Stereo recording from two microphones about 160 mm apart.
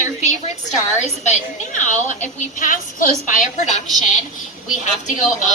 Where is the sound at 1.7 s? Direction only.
50° left (ahead or behind).